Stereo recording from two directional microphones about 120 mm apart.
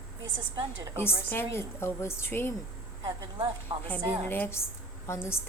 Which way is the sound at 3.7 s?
35° right (ahead or behind).